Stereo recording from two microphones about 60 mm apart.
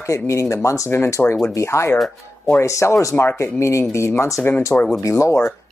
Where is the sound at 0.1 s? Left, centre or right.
Left.